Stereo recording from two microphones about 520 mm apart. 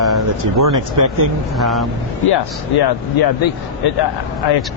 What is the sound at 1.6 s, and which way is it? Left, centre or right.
Speech, centre.